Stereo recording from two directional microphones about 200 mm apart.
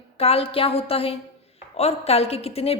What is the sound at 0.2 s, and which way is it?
A woman's voice, 30° left (ahead or behind).